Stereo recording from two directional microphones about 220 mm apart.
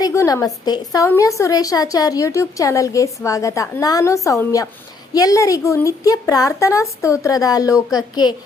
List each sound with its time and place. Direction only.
0.0 s a woman's voice: 15° left (ahead or behind)